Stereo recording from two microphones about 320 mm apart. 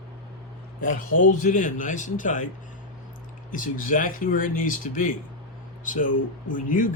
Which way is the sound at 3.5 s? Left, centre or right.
Left.